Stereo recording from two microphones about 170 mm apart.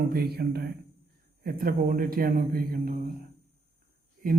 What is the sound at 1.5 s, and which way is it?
Speech, 60° right (ahead or behind).